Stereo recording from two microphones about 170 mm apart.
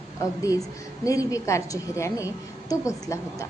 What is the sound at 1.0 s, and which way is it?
A woman's voice, 20° left (ahead or behind).